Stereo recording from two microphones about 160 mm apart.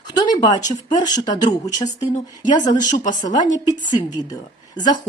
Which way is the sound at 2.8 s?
50° left (ahead or behind).